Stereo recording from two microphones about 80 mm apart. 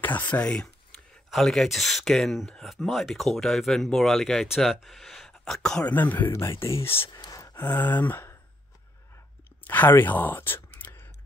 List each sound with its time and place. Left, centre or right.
0.0 s speech: left
6.3 s speech: left
7.1 s gasp: left
7.5 s speech: left
9.7 s speech: left